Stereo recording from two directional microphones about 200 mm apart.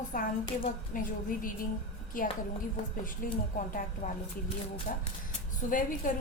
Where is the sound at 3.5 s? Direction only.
40° left (ahead or behind).